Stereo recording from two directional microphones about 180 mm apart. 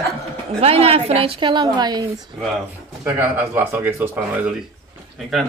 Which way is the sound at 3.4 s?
15° right (ahead or behind).